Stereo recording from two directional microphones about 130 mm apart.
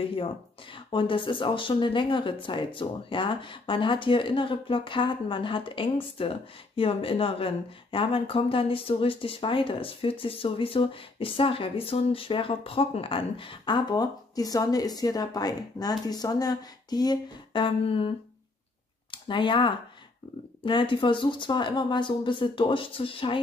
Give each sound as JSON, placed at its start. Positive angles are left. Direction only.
{"t": 0.9, "sound": "speech", "side_deg": 40}